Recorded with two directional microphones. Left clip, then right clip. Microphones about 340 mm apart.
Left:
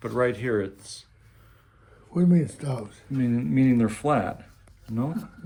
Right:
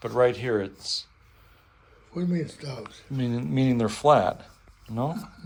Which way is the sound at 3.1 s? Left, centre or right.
Centre.